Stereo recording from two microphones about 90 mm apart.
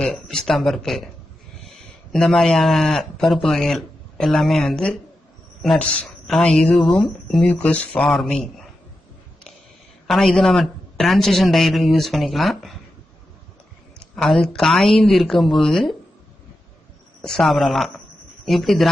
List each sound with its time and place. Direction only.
0.0 s speech: 5° left (ahead or behind)
2.1 s a man's voice: 5° left (ahead or behind)
7.4 s speech: 15° left (ahead or behind)
10.1 s speech: 5° left (ahead or behind)
14.0 s speech: 5° left (ahead or behind)
17.2 s speech: 5° left (ahead or behind)